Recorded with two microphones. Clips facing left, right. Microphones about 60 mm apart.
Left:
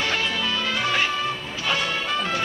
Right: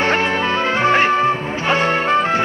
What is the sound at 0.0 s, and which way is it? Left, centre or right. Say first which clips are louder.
Music: right 8 dB; right.